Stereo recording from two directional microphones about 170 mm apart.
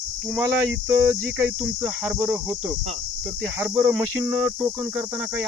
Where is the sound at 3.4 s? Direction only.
10° right (ahead or behind).